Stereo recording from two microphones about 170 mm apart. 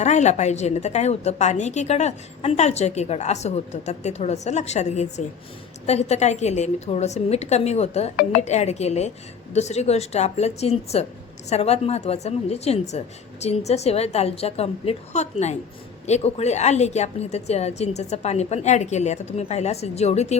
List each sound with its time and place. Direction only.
0.0 s a woman's voice: 40° left (ahead or behind)